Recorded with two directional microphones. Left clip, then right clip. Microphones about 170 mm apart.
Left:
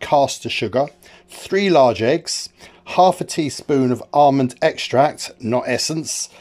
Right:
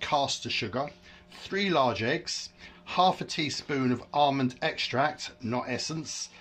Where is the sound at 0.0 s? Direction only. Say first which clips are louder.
Left 11 dB; 55° left (ahead or behind).